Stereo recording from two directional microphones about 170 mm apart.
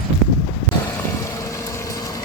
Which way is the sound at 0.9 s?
15° left (ahead or behind).